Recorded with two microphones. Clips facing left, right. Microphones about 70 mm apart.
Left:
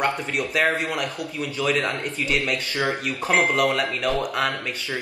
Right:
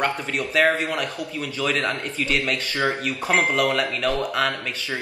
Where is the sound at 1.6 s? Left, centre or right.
Centre.